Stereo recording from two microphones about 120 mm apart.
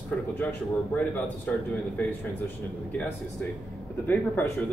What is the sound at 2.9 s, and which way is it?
Speech, 10° left (ahead or behind).